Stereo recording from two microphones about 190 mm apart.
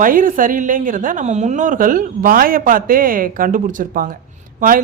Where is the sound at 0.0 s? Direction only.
45° right (ahead or behind).